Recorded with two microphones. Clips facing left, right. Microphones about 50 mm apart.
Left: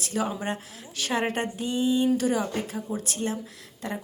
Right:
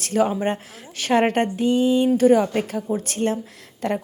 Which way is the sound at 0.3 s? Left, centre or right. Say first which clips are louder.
Right 7 dB; right.